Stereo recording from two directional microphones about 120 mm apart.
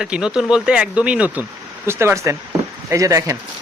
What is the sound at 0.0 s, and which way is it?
Speech, 5° right (ahead or behind).